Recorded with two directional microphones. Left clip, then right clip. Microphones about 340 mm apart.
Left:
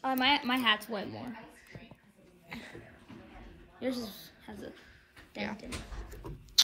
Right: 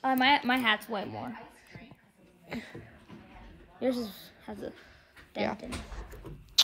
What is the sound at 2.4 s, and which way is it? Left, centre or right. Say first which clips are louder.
Speech: right 4 dB; centre.